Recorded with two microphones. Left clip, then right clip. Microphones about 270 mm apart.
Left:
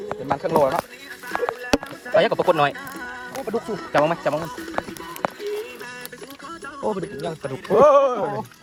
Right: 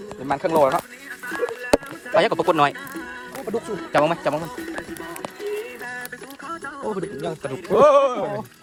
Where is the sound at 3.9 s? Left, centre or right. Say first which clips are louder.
Even; centre.